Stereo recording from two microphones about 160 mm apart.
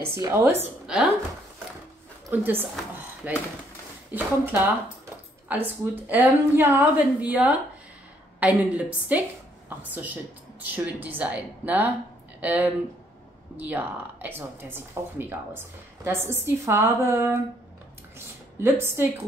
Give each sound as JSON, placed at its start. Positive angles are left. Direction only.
{"t": 0.1, "sound": "a woman's voice", "side_deg": -15}
{"t": 2.2, "sound": "a woman's voice", "side_deg": -15}
{"t": 18.1, "sound": "a sound", "side_deg": -15}